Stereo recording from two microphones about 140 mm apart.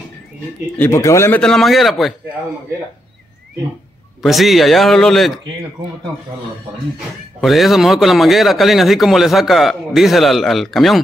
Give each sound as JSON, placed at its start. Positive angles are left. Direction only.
{"t": 0.7, "sound": "speech", "side_deg": 20}
{"t": 1.4, "sound": "a man's voice", "side_deg": 0}
{"t": 4.2, "sound": "a man's voice", "side_deg": 0}
{"t": 7.3, "sound": "a man's voice", "side_deg": 0}